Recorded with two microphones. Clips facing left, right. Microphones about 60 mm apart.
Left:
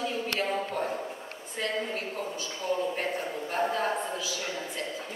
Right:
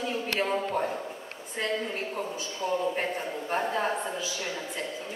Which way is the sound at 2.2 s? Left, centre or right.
Right.